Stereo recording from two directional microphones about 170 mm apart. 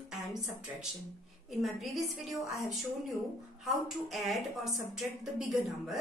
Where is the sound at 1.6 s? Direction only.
Centre (ahead or behind).